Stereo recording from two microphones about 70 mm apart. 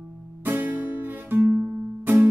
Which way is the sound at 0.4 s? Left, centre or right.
Right.